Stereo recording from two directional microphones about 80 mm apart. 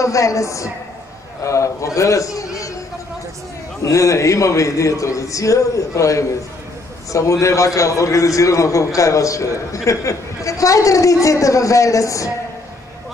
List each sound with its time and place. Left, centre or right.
0.0 s a man's voice: left
2.0 s a sound: left
3.8 s a man's voice: left